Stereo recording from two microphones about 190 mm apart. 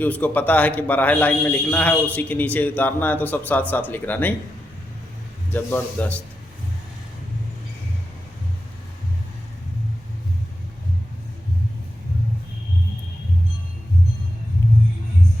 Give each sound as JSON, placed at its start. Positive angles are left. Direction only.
{"t": 0.0, "sound": "a man's voice", "side_deg": 10}
{"t": 5.5, "sound": "a man's voice", "side_deg": 10}